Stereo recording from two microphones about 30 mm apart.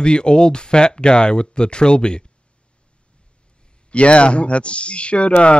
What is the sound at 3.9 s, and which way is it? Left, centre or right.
Speech, left.